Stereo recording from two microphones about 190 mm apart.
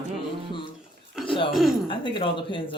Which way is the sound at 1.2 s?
5° right (ahead or behind).